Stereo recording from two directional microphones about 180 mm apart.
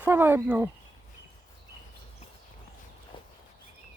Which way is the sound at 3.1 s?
30° left (ahead or behind).